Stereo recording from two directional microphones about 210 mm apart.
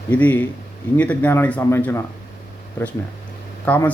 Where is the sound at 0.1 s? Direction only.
5° left (ahead or behind).